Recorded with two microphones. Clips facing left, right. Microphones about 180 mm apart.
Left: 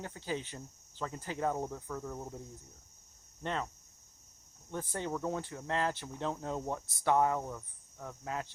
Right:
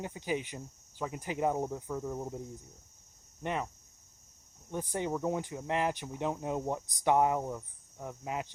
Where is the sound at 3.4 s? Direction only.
15° right (ahead or behind).